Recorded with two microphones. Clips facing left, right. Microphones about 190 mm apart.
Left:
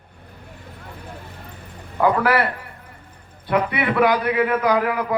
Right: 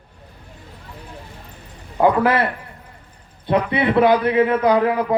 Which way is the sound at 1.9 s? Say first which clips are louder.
Right 2 dB; 20° right (ahead or behind).